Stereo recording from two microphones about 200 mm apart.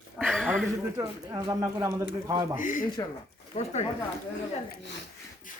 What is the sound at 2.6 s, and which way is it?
Speech, 40° left (ahead or behind).